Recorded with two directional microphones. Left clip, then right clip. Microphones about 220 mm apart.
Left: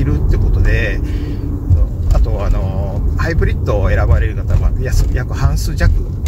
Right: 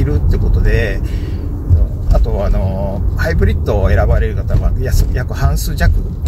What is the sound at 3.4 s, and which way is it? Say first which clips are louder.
Speech: right 2 dB; 10° right (ahead or behind).